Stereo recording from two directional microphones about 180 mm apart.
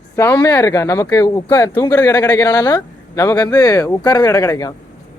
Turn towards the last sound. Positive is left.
turn(degrees=20)  # may be behind; listen again after turning